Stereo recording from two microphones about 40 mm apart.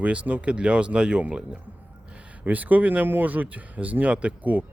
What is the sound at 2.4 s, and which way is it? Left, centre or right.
Speech, right.